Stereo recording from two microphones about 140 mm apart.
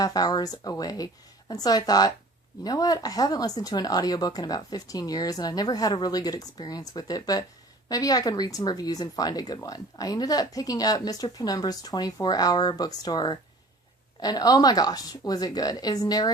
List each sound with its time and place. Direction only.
0.0 s speech: 30° left (ahead or behind)